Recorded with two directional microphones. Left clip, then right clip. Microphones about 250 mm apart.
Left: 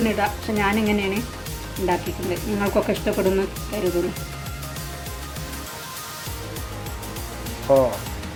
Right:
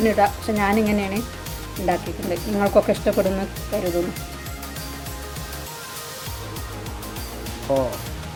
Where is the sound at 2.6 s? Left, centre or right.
Right.